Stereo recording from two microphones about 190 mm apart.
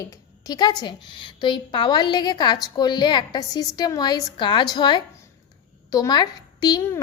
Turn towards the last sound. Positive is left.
turn(degrees=20)  # may be behind; listen again after turning